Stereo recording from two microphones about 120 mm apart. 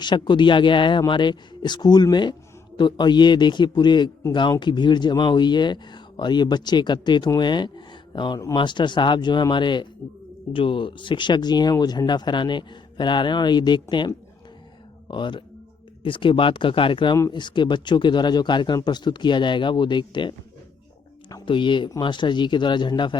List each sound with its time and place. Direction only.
0.0 s speech: 40° left (ahead or behind)
15.0 s speech: 40° left (ahead or behind)
21.4 s speech: 45° left (ahead or behind)